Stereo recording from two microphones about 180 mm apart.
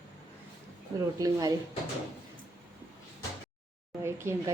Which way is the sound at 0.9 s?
20° right (ahead or behind).